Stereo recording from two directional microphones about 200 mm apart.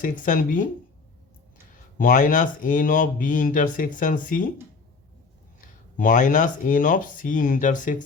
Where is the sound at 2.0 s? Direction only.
40° left (ahead or behind).